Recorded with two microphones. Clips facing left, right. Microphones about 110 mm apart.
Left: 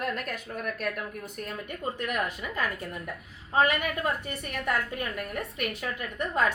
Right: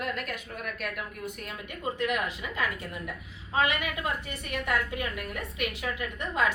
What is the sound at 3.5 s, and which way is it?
A woman's voice, 45° left (ahead or behind).